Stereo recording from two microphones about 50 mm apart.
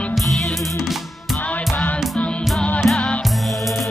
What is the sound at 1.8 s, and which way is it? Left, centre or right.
Music, left.